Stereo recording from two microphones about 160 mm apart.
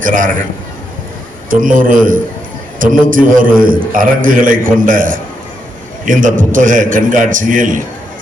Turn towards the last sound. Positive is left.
turn(degrees=-55)  # may be behind; listen again after turning